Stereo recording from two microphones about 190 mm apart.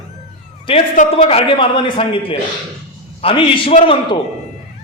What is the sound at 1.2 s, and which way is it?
A man's voice, 30° left (ahead or behind).